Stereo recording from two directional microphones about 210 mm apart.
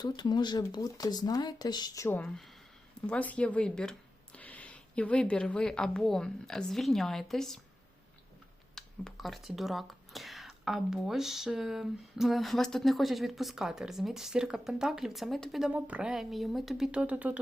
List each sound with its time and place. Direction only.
0.0 s speech: 20° left (ahead or behind); by 7.6 s centre (ahead or behind)
8.7 s speech: centre (ahead or behind)